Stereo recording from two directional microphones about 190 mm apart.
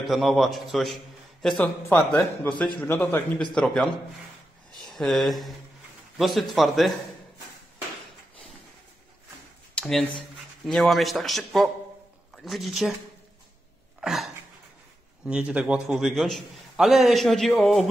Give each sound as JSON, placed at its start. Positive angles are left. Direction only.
{"t": 0.0, "sound": "a man's voice", "side_deg": 0}
{"t": 9.8, "sound": "a man's voice", "side_deg": 0}
{"t": 14.0, "sound": "a man's voice", "side_deg": 0}